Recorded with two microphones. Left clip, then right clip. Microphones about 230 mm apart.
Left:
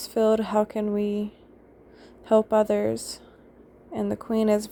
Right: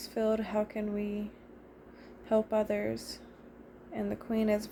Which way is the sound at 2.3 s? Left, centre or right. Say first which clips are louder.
Left 9 dB; left.